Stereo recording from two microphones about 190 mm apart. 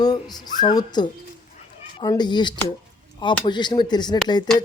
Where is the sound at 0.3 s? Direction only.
20° left (ahead or behind).